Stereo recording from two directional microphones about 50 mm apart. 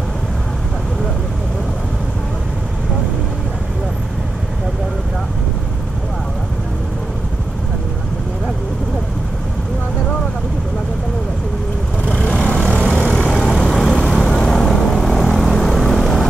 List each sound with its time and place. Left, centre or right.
12.0 s vehicle: centre